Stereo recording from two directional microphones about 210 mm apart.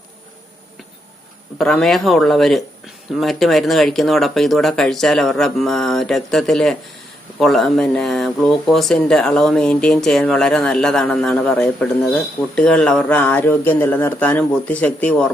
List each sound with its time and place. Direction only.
1.5 s speech: centre (ahead or behind)